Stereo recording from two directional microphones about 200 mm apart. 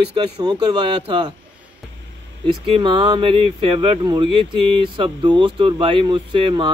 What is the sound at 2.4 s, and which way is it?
Speech, 25° right (ahead or behind).